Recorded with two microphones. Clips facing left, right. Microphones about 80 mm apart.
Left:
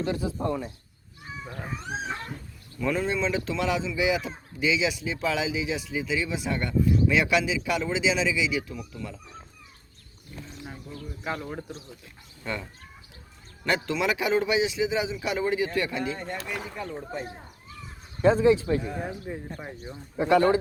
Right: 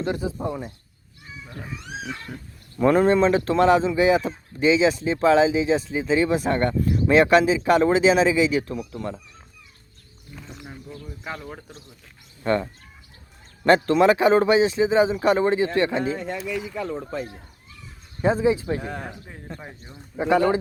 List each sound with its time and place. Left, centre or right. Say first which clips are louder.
0.0 s speech: right 2 dB; right
0.4 s speech: left 3 dB; centre
1.6 s speech: left 1 dB; left
2.7 s speech: right 10 dB; right
13.7 s speech: right 10 dB; right
16.7 s speech: right 5 dB; right
18.2 s speech: left 1 dB; centre
19.3 s speech: left 8 dB; centre
20.1 s speech: right 1 dB; right